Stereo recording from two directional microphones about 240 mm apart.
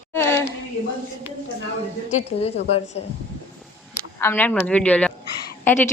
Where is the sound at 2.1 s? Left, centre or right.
Left.